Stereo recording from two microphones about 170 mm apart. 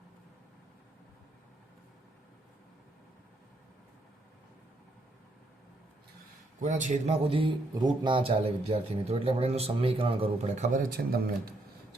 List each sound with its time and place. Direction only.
6.6 s a man's voice: 45° right (ahead or behind); by 11.5 s 65° right (ahead or behind)